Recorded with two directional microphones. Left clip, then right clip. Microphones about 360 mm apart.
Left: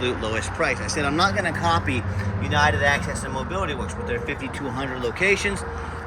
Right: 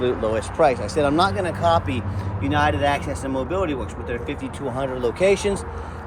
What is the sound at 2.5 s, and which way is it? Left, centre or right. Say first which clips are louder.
Speech: even; centre.